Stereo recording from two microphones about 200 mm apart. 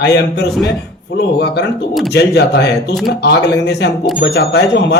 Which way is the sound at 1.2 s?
55° left (ahead or behind).